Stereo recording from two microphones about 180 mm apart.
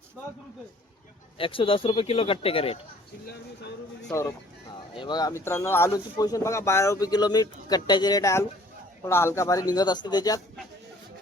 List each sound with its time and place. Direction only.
1.4 s speech: 30° left (ahead or behind)
4.1 s speech: 15° left (ahead or behind)